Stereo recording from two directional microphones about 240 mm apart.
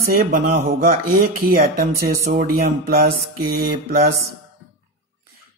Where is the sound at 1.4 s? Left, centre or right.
Right.